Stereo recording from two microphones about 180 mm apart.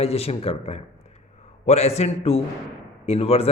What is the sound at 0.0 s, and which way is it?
A man's voice, 35° left (ahead or behind).